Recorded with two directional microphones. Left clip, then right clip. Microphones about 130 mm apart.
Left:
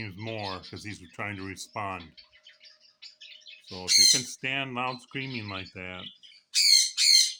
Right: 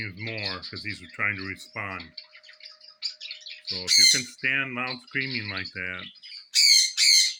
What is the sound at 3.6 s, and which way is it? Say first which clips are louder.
Speech: right 2 dB; 25° left (ahead or behind).